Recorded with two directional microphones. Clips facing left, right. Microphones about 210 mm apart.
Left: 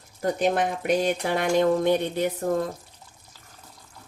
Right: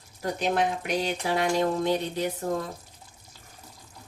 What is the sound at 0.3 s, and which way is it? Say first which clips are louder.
A woman's voice: left 1 dB; 55° left (ahead or behind).